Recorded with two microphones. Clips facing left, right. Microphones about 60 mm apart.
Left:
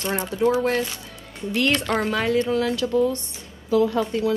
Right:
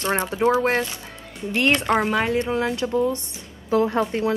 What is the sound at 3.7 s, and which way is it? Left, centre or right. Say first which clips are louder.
Speech: even; right.